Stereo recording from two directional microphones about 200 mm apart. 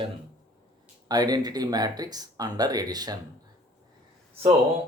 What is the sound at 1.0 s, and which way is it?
Speech, 20° right (ahead or behind).